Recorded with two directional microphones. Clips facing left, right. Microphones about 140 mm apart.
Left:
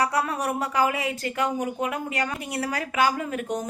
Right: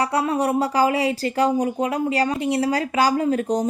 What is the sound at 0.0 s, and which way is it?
A woman's voice, 30° right (ahead or behind).